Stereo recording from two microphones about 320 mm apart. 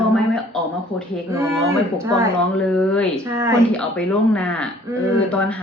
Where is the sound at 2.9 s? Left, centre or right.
Centre.